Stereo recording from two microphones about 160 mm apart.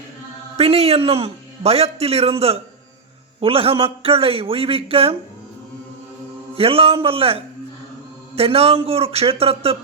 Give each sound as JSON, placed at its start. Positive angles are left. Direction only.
{"t": 0.5, "sound": "a man's voice", "side_deg": -40}
{"t": 6.5, "sound": "a man's voice", "side_deg": -35}